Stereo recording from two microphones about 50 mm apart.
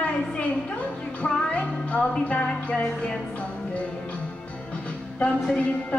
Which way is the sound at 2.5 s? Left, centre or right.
Left.